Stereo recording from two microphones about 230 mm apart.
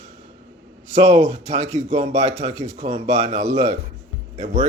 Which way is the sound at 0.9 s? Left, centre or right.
Right.